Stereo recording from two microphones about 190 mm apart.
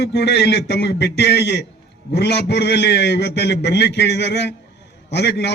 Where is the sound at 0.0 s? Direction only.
60° left (ahead or behind).